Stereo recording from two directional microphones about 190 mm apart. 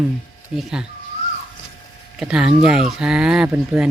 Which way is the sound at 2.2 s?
5° right (ahead or behind).